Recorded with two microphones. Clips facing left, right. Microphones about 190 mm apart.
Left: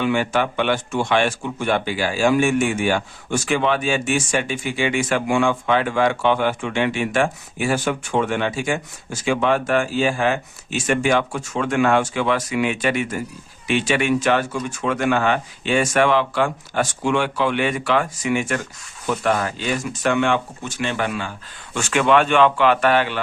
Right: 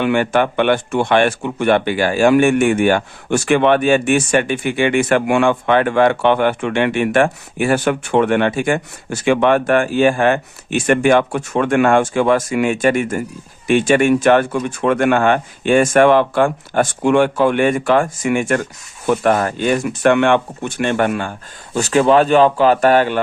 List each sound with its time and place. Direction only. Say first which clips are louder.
0.0 s speech: right 5 dB; 60° right (ahead or behind)
21.8 s speech: right 5 dB; 35° right (ahead or behind)